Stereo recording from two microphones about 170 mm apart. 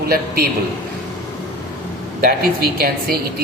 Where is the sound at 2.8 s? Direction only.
65° right (ahead or behind).